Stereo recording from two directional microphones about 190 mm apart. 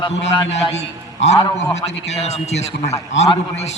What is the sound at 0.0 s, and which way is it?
A man's voice, 30° left (ahead or behind).